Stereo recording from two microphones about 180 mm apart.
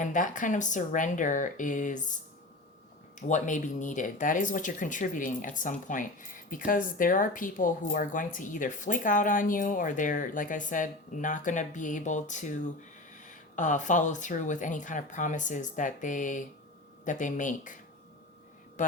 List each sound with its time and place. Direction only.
0.0 s speech: 45° left (ahead or behind)
3.2 s speech: 45° left (ahead or behind)
18.8 s speech: 45° left (ahead or behind)